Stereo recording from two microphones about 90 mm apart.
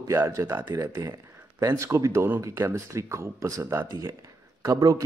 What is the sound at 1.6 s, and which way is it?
Speech, 35° right (ahead or behind).